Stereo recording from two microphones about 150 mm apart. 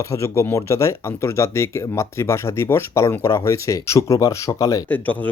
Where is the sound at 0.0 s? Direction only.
20° left (ahead or behind).